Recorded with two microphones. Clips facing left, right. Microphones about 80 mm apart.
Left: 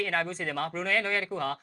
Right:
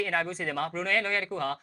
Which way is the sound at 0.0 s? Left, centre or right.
Centre.